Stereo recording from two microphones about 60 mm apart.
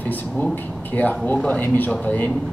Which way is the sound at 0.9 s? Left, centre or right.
Left.